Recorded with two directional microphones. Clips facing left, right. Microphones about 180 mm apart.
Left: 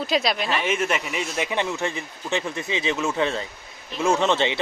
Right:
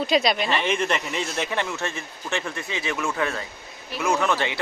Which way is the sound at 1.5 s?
15° left (ahead or behind).